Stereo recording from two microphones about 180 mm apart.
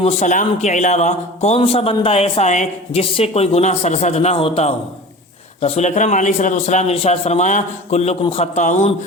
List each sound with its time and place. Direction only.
0.0 s speech: 40° left (ahead or behind)